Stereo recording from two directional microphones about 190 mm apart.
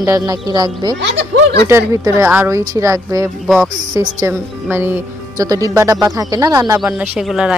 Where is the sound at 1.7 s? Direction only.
15° right (ahead or behind).